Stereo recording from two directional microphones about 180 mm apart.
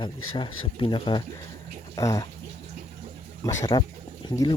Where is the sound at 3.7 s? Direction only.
25° left (ahead or behind).